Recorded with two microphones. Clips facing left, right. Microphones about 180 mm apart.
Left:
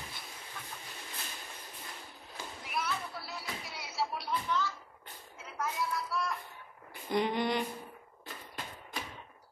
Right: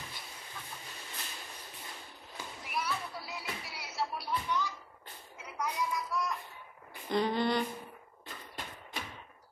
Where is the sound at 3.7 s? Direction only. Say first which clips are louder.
Left 1 dB; centre (ahead or behind).